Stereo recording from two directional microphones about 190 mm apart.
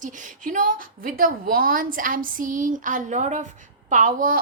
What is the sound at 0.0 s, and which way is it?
A woman's voice, 45° right (ahead or behind).